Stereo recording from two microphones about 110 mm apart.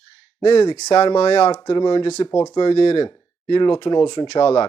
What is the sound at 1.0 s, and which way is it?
Speech, 45° left (ahead or behind).